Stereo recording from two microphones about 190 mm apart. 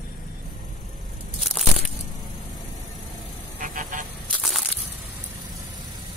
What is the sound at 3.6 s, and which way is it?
Vehicle, 45° right (ahead or behind).